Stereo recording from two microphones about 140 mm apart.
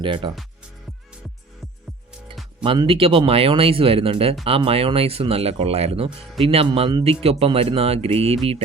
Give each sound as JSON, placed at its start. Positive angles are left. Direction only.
{"t": 0.0, "sound": "speech", "side_deg": -35}
{"t": 2.6, "sound": "speech", "side_deg": -40}